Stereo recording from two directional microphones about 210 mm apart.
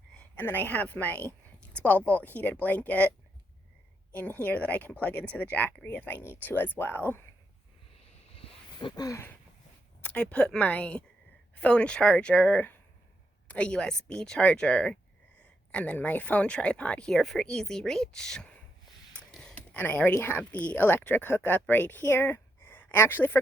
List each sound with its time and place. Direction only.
0.1 s a woman's voice: 5° left (ahead or behind)
8.3 s a sound: 25° left (ahead or behind)
10.0 s speech: 5° left (ahead or behind)